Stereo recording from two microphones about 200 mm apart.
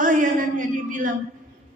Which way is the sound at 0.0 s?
40° right (ahead or behind).